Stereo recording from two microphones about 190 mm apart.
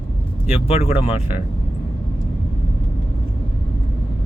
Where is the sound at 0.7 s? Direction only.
35° left (ahead or behind).